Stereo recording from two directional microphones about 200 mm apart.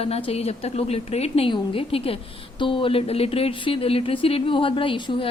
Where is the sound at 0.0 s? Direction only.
30° left (ahead or behind).